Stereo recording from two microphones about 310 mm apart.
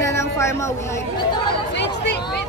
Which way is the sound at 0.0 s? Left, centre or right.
Centre.